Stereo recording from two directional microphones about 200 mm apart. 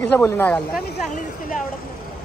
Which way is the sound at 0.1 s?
10° left (ahead or behind).